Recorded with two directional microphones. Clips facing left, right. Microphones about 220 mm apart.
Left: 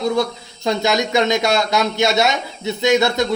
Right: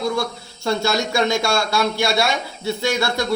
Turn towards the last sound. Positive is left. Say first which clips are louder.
# left 6 dB
turn(degrees=20)  # may be behind; listen again after turning